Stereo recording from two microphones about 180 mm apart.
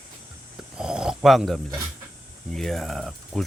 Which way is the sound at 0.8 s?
5° right (ahead or behind).